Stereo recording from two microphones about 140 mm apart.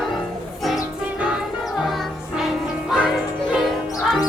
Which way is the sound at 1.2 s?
5° right (ahead or behind).